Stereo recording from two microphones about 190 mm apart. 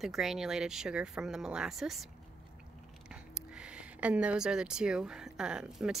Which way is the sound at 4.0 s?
5° right (ahead or behind).